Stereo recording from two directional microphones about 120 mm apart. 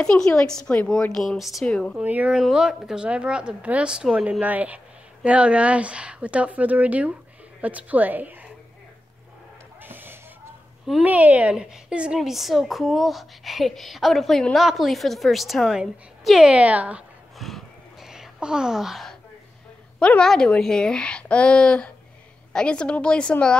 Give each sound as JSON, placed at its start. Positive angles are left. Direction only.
{"t": 0.0, "sound": "a woman's voice", "side_deg": 10}
{"t": 2.0, "sound": "speech", "side_deg": -10}
{"t": 9.8, "sound": "a sound", "side_deg": -15}
{"t": 10.9, "sound": "a woman's voice", "side_deg": -10}
{"t": 17.4, "sound": "a sound", "side_deg": 0}
{"t": 20.0, "sound": "a woman's voice", "side_deg": 5}